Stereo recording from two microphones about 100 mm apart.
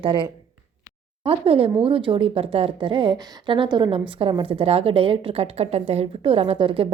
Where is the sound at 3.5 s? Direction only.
55° right (ahead or behind).